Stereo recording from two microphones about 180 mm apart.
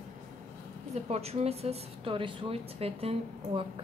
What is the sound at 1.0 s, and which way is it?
A woman's voice, 35° right (ahead or behind).